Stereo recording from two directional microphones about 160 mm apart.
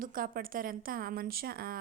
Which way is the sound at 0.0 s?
60° right (ahead or behind).